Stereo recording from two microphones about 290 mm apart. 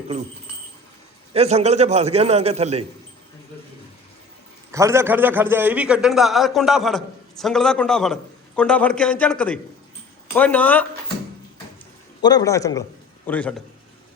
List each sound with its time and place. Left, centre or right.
1.3 s a man's voice: right
4.7 s a man's voice: centre
12.2 s a man's voice: centre